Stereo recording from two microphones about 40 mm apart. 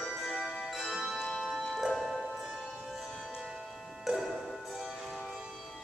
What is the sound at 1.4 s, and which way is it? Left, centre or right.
Music, centre.